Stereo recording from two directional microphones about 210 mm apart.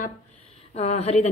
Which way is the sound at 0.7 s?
30° left (ahead or behind).